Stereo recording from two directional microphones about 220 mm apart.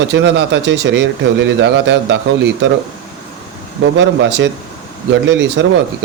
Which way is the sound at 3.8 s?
55° right (ahead or behind).